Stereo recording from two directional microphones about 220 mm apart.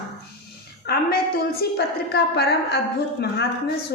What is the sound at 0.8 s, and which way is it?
A woman's voice, 45° left (ahead or behind).